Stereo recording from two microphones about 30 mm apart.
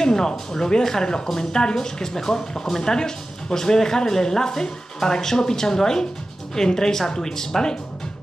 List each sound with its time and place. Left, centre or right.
0.0 s speech: left